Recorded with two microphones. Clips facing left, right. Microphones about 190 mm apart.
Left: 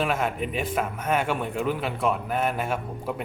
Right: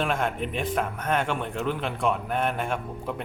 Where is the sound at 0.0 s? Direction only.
5° left (ahead or behind).